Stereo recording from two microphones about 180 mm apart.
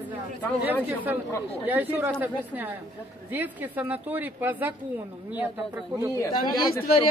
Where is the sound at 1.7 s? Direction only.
10° right (ahead or behind).